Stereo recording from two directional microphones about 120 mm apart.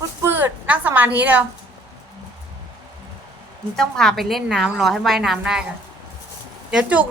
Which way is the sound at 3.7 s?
5° left (ahead or behind).